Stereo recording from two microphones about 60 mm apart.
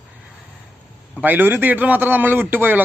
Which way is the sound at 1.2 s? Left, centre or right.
Right.